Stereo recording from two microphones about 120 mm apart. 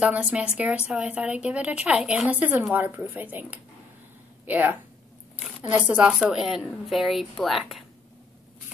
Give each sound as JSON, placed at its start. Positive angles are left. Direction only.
{"t": 0.0, "sound": "a woman's voice", "side_deg": -10}